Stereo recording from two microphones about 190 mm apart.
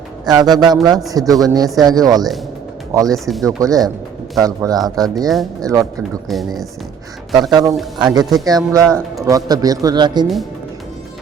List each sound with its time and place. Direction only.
0.3 s speech: 20° right (ahead or behind)
6.2 s speech: centre (ahead or behind)
7.5 s speech: 15° right (ahead or behind)